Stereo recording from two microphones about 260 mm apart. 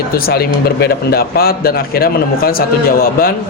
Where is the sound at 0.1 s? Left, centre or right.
Left.